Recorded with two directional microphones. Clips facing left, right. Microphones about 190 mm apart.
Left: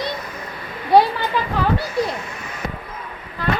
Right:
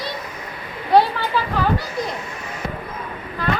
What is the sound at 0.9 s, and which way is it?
Speech, 10° left (ahead or behind).